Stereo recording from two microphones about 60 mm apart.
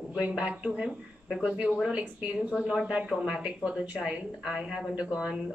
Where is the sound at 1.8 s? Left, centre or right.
Centre.